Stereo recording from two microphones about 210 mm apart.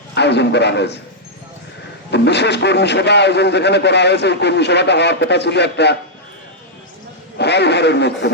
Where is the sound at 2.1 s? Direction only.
55° left (ahead or behind).